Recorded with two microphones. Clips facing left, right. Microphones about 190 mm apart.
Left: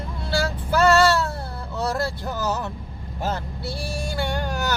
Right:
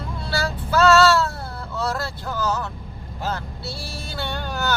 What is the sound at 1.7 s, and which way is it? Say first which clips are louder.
Speech: left 2 dB; 20° left (ahead or behind).